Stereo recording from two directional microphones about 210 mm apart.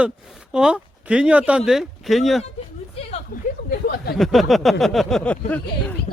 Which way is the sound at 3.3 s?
40° left (ahead or behind).